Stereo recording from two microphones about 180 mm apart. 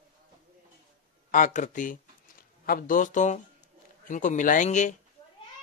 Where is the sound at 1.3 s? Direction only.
45° left (ahead or behind).